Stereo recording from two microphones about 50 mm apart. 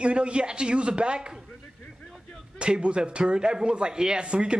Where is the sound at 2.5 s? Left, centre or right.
Centre.